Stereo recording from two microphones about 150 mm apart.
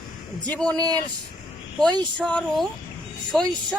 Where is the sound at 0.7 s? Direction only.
25° right (ahead or behind).